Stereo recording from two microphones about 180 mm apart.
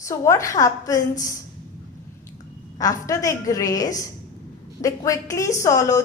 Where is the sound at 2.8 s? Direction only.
20° left (ahead or behind).